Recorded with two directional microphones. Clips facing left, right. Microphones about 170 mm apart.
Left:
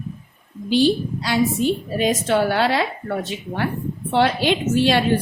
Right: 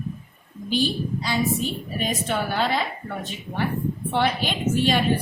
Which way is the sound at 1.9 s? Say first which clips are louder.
Left 6 dB; 90° left.